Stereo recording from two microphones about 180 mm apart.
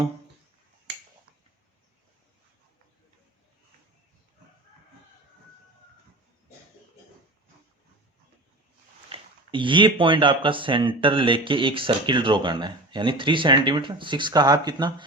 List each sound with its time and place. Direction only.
9.0 s speech: 30° right (ahead or behind)